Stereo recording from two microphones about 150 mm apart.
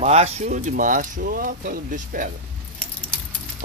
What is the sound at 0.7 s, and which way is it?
Speech, 65° right (ahead or behind).